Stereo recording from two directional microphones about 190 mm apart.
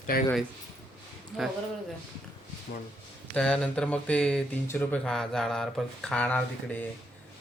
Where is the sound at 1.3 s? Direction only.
Centre (ahead or behind).